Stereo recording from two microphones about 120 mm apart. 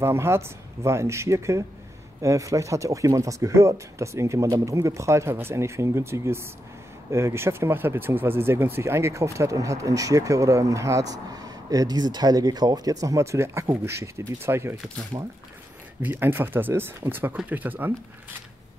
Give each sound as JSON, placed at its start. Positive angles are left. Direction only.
{"t": 0.0, "sound": "speech", "side_deg": -20}